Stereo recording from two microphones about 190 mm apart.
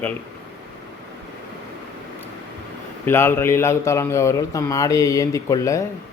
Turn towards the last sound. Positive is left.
turn(degrees=15)  # may be behind; listen again after turning